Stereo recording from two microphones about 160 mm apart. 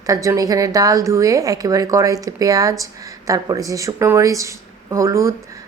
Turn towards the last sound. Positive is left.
turn(degrees=-20)  # may be behind; listen again after turning